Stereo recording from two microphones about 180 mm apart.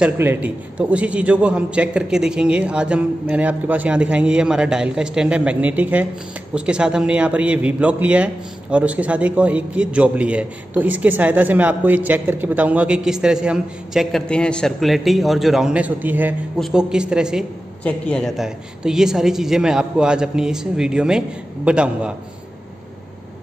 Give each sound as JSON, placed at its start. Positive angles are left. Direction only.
{"t": 0.0, "sound": "a man's voice", "side_deg": -10}
{"t": 17.8, "sound": "speech", "side_deg": 5}